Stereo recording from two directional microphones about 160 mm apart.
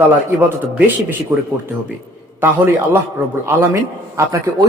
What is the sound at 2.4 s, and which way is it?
Speech, 15° right (ahead or behind).